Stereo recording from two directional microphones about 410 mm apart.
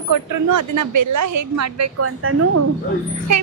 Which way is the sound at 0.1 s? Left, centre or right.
Right.